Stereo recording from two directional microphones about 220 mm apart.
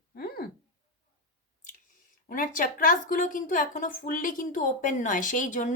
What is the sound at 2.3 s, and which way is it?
A woman's voice, 40° left (ahead or behind).